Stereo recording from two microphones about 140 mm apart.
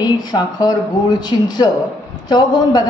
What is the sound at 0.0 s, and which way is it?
A woman's voice, 30° left (ahead or behind).